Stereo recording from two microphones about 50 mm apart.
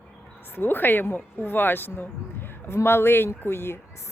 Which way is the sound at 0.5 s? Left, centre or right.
Left.